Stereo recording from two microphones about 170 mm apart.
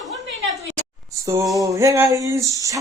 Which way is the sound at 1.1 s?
20° right (ahead or behind).